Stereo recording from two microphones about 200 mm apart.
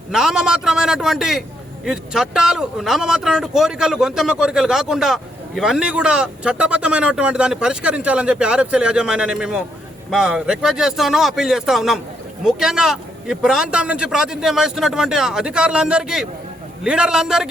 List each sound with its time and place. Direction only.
0.1 s a man's voice: 5° right (ahead or behind)